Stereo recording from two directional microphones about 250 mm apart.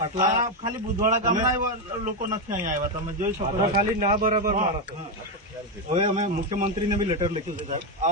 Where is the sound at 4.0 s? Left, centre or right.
Right.